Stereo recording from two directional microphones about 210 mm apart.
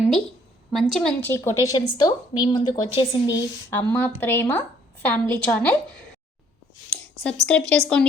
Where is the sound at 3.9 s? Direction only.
10° left (ahead or behind).